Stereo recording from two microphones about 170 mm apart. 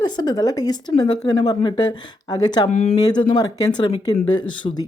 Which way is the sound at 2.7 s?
40° left (ahead or behind).